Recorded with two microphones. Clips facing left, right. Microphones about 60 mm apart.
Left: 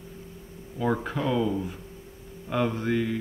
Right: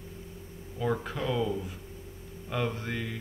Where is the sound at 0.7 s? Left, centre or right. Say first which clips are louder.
Left 4 dB; left.